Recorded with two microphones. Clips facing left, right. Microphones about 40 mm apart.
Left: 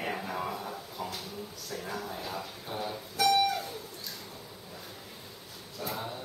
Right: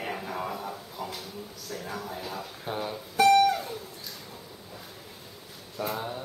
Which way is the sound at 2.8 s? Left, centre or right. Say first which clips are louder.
Right 6 dB; centre.